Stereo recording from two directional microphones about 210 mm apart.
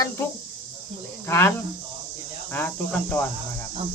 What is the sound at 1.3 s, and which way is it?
Speech, 10° left (ahead or behind).